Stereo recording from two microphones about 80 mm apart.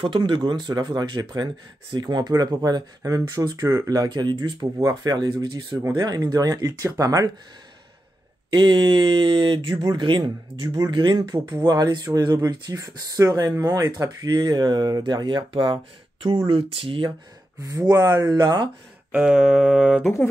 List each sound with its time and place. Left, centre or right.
0.1 s speech: right
4.8 s speech: right
8.5 s a sound: right
9.9 s speech: right
10.9 s a sound: right
11.4 s speech: right
14.0 s speech: right
17.6 s speech: right
19.1 s a sound: centre